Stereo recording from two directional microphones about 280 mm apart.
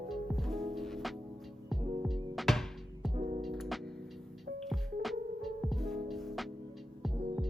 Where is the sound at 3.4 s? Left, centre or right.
Centre.